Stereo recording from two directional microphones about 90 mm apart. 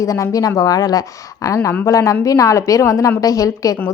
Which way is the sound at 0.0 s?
35° left (ahead or behind).